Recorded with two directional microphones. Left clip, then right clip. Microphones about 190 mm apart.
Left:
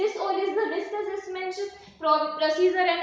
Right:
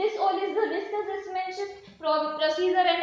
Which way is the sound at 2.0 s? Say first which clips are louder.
Left 2 dB; 15° right (ahead or behind).